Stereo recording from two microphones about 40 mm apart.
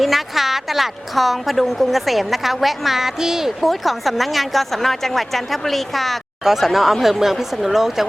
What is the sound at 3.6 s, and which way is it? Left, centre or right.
A woman's voice, centre.